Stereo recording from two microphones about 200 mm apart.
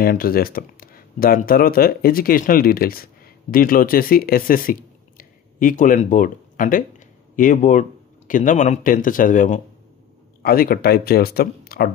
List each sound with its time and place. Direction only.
0.0 s speech: 50° left (ahead or behind)